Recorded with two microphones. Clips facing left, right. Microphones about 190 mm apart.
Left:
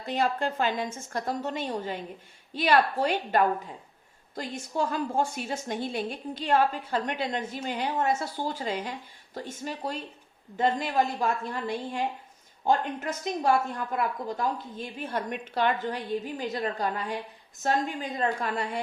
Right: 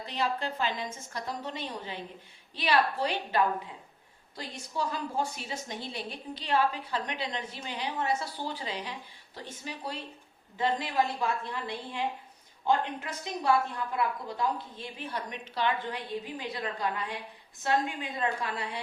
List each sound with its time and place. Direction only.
0.0 s a woman's voice: 50° left (ahead or behind)